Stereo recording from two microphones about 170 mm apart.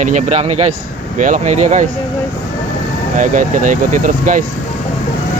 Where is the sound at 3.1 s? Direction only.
50° right (ahead or behind).